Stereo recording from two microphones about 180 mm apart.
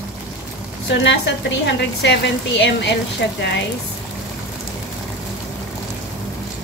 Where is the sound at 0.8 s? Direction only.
75° left (ahead or behind).